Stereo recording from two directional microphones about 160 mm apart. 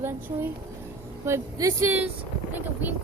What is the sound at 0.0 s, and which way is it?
Speech, 15° right (ahead or behind).